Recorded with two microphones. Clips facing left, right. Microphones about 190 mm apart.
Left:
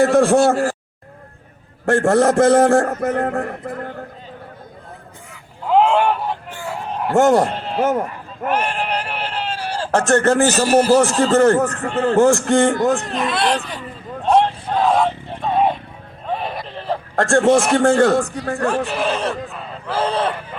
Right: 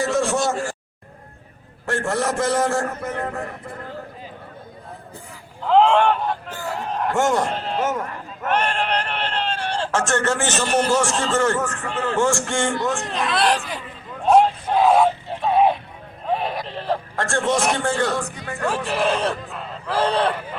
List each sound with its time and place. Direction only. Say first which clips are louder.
0.0 s speech: left 8 dB; 55° left (ahead or behind)
1.9 s a man's voice: left 9 dB; 55° left (ahead or behind)
5.6 s honk: even; 5° left (ahead or behind)
6.7 s a sound: even; 5° left (ahead or behind)
7.1 s a man's voice: left 7 dB; 35° left (ahead or behind)
7.5 s speech: even; centre (ahead or behind)
8.4 s a sound: left 1 dB; 5° left (ahead or behind)
9.9 s a man's voice: left 8 dB; 40° left (ahead or behind)
13.1 s speech: left 1 dB; centre (ahead or behind)
14.3 s vehicle: even; 5° right (ahead or behind)
17.2 s a man's voice: left 9 dB; 45° left (ahead or behind)
18.9 s speech: even; centre (ahead or behind)